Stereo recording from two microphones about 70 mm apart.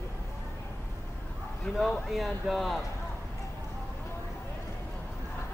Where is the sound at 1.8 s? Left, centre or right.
Centre.